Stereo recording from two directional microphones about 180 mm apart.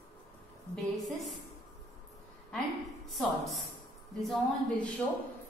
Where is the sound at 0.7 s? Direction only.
Centre (ahead or behind).